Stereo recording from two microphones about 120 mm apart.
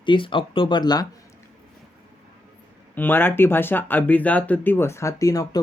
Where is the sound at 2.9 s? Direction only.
15° left (ahead or behind).